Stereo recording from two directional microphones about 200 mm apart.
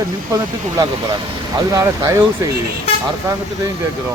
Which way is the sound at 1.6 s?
15° right (ahead or behind).